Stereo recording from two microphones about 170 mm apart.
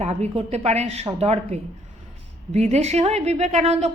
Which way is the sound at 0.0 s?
40° right (ahead or behind).